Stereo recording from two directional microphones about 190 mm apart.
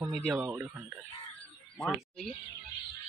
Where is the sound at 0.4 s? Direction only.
10° right (ahead or behind).